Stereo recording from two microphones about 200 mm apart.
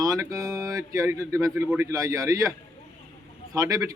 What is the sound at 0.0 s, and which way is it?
Speech, 15° right (ahead or behind).